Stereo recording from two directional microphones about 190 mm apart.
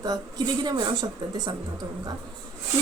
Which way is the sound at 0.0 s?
20° right (ahead or behind).